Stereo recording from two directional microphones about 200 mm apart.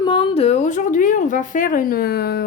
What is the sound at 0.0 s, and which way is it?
A woman's voice, 25° left (ahead or behind).